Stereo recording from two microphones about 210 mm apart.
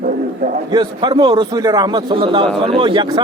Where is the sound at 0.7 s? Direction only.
20° right (ahead or behind).